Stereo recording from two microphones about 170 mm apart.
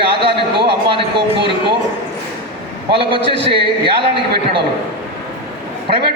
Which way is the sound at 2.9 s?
30° right (ahead or behind).